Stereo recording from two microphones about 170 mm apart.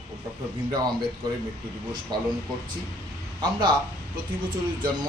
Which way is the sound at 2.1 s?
25° right (ahead or behind).